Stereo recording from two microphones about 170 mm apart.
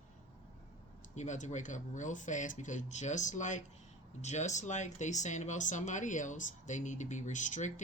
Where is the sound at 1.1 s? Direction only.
45° left (ahead or behind).